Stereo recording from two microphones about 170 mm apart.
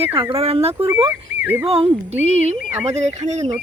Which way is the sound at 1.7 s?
35° right (ahead or behind).